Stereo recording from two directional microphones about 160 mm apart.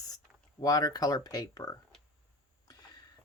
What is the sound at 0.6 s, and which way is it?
Speech, 25° left (ahead or behind).